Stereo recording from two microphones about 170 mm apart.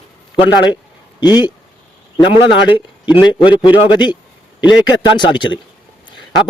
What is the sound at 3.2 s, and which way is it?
A man's voice, 30° left (ahead or behind).